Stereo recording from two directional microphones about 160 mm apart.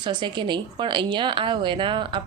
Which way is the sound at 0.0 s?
30° right (ahead or behind).